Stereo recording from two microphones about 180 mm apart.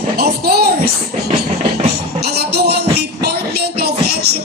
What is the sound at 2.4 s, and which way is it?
Music, 65° right (ahead or behind).